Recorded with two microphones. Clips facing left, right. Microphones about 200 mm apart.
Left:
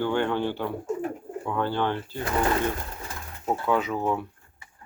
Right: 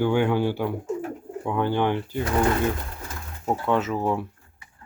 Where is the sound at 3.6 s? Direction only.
Centre (ahead or behind).